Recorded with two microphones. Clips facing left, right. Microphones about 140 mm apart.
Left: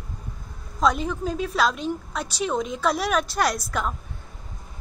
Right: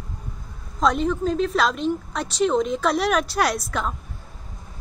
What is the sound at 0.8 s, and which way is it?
A woman's voice, 5° left (ahead or behind).